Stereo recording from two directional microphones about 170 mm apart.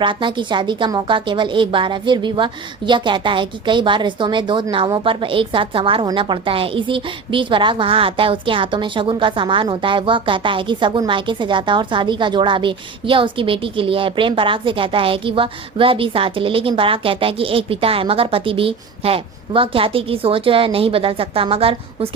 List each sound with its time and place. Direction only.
0.0 s a woman's voice: 30° right (ahead or behind)